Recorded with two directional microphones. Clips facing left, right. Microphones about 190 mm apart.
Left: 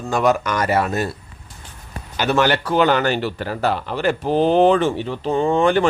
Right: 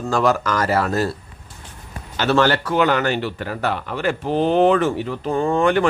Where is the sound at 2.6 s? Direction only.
30° left (ahead or behind).